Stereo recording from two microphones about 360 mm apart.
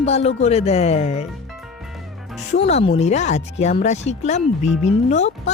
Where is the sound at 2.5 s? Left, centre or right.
Centre.